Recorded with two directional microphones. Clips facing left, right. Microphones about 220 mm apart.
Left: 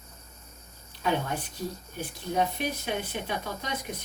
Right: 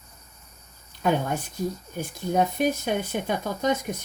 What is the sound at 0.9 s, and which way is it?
Speech, 45° right (ahead or behind).